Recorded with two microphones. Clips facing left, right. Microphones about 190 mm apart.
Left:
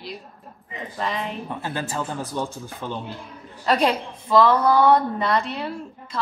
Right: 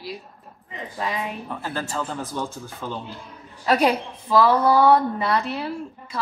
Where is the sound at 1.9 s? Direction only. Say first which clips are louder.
Left 1 dB; 15° left (ahead or behind).